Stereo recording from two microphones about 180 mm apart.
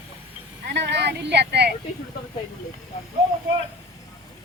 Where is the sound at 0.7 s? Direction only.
70° right (ahead or behind).